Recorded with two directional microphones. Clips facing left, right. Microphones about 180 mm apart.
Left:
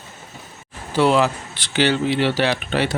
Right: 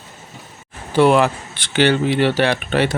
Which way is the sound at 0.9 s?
55° right (ahead or behind).